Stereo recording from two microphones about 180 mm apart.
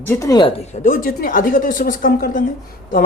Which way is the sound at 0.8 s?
50° left (ahead or behind).